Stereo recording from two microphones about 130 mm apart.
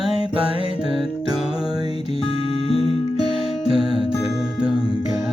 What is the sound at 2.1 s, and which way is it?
Music, 45° left (ahead or behind).